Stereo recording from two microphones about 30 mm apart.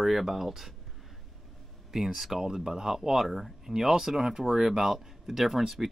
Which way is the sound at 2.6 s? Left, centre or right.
Centre.